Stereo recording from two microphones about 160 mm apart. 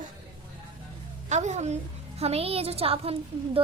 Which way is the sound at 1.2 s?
45° right (ahead or behind).